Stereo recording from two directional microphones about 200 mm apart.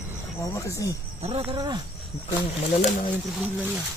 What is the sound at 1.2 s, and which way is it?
Speech, 30° right (ahead or behind).